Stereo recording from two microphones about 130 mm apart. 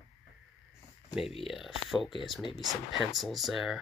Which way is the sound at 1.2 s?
45° left (ahead or behind).